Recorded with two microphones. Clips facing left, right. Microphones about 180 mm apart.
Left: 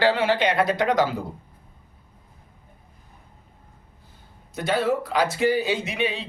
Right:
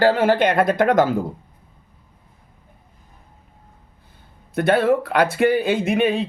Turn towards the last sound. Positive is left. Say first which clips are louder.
# right 8 dB
turn(degrees=-50)  # may be behind; listen again after turning